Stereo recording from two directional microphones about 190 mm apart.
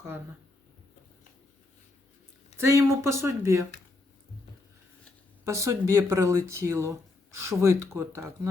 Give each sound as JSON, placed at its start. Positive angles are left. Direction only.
{"t": 2.6, "sound": "speech", "side_deg": -15}
{"t": 5.5, "sound": "speech", "side_deg": -15}